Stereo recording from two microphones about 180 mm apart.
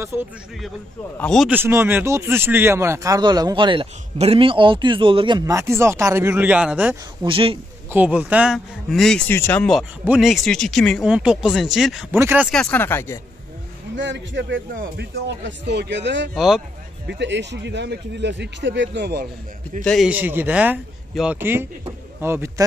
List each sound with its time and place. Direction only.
0.0 s speech: 15° right (ahead or behind)
1.1 s speech: 5° left (ahead or behind)
1.5 s speech: 10° right (ahead or behind)
7.2 s a man's voice: 30° right (ahead or behind)
7.9 s speech: 10° right (ahead or behind)
12.4 s speech: 5° left (ahead or behind)
13.9 s speech: 85° right
14.7 s speech: 50° right (ahead or behind)
15.2 s a man's voice: 75° right (ahead or behind)
16.3 s speech: 5° right (ahead or behind)
17.1 s a man's voice: 75° right (ahead or behind)
19.8 s speech: 5° left (ahead or behind)
20.1 s speech: 10° right (ahead or behind)